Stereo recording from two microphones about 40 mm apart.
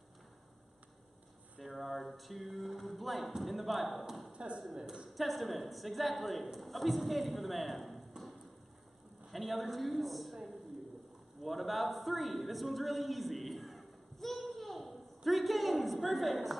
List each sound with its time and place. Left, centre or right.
1.6 s a sound: centre
2.1 s speech: centre
4.3 s a sound: right
5.1 s speech: centre
9.3 s speech: centre
11.4 s a man's voice: centre